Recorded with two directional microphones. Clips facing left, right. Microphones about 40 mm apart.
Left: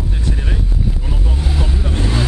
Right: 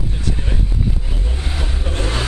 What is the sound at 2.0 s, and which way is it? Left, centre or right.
Vehicle, right.